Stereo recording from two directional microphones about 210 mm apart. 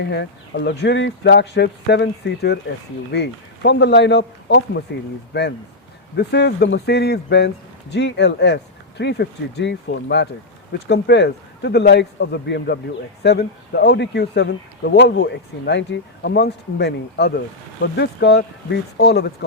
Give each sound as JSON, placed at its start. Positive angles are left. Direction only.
{"t": 0.0, "sound": "speech", "side_deg": 55}